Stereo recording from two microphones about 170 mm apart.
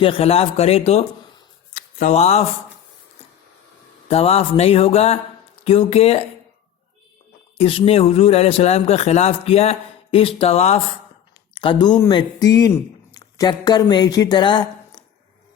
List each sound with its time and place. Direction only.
0.0 s a man's voice: 35° left (ahead or behind)
4.1 s a man's voice: 35° left (ahead or behind)
7.6 s a man's voice: 35° left (ahead or behind)
11.5 s speech: 30° left (ahead or behind)